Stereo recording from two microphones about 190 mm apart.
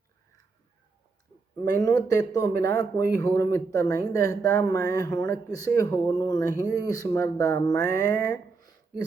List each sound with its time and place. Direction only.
1.7 s speech: 20° left (ahead or behind)